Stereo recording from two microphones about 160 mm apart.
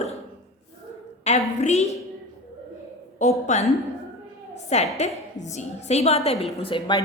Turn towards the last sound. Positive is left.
turn(degrees=35)  # may be behind; listen again after turning